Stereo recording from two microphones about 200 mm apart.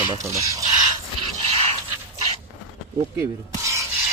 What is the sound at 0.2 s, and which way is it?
Speech, 15° right (ahead or behind).